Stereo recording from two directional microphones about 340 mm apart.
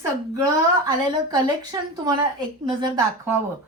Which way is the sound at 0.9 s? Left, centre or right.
Centre.